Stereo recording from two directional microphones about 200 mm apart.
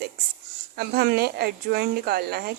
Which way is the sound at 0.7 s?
55° right (ahead or behind).